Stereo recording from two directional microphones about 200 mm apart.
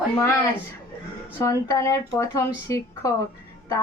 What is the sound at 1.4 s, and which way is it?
A woman's voice, 15° left (ahead or behind).